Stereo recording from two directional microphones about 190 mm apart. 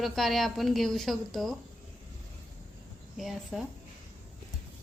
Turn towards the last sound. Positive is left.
turn(degrees=0)  # may be behind; listen again after turning